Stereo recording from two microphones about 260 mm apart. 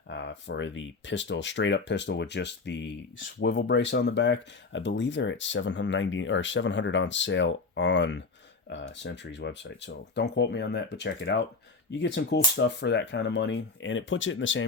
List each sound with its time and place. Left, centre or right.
0.1 s speech: left